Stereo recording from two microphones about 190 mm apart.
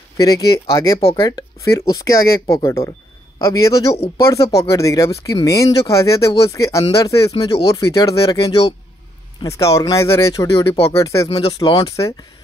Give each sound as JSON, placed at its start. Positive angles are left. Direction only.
{"t": 0.2, "sound": "speech", "side_deg": 20}
{"t": 0.9, "sound": "speech", "side_deg": 30}
{"t": 1.2, "sound": "speech", "side_deg": 20}